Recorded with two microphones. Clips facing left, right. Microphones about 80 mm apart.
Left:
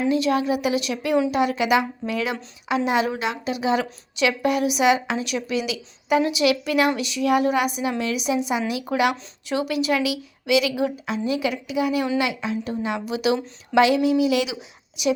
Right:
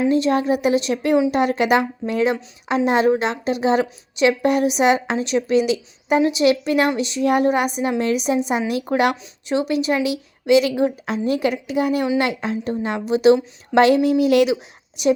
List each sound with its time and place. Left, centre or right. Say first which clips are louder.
0.1 s a woman's voice: right 3 dB; right
1.3 s speech: right 3 dB; right
2.0 s a woman's voice: right 6 dB; right
9.5 s a woman's voice: right 3 dB; right